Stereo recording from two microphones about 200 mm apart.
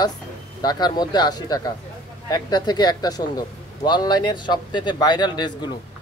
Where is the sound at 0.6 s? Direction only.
20° left (ahead or behind).